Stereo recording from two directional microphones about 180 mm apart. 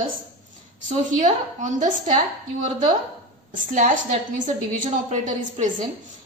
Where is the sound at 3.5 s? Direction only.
45° right (ahead or behind).